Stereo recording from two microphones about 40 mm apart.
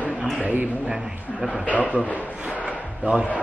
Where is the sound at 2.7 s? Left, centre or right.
Right.